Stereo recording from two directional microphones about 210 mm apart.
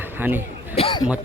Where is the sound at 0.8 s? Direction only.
25° left (ahead or behind).